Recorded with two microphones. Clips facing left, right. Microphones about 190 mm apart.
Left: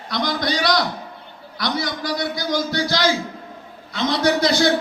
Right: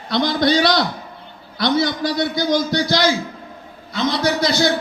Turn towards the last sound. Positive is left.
turn(degrees=0)  # may be behind; listen again after turning